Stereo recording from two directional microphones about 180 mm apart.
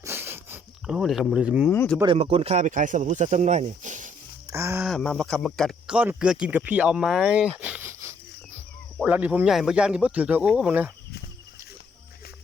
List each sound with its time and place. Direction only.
0.0 s a sound: 15° right (ahead or behind)
2.0 s speech: 30° right (ahead or behind)
4.4 s speech: 15° right (ahead or behind)
4.9 s speech: 5° left (ahead or behind)